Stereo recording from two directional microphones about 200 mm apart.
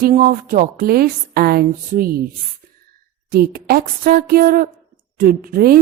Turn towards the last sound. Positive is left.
turn(degrees=-45)  # may be behind; listen again after turning